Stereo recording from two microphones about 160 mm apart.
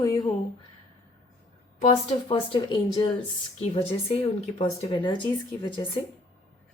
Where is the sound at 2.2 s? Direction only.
35° left (ahead or behind).